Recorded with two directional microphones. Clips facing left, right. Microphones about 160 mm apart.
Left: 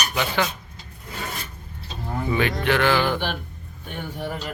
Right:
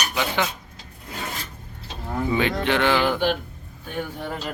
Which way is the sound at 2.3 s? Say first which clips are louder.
Left 1 dB; 20° right (ahead or behind).